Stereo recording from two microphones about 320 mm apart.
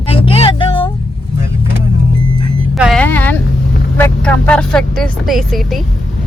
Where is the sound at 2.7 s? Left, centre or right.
Centre.